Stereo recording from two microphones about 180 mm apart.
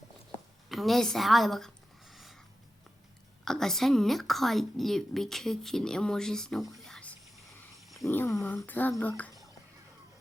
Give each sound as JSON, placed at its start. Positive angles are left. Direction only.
{"t": 0.7, "sound": "a sound", "side_deg": 0}
{"t": 3.4, "sound": "a woman's voice", "side_deg": 5}
{"t": 8.0, "sound": "speech", "side_deg": 15}